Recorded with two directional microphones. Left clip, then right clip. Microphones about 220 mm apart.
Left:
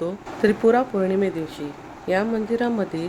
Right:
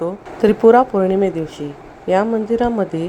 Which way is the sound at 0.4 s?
20° right (ahead or behind).